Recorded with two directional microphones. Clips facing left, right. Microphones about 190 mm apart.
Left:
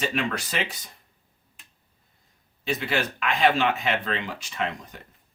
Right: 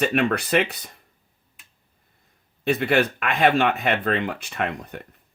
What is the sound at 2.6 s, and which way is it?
Speech, 55° right (ahead or behind).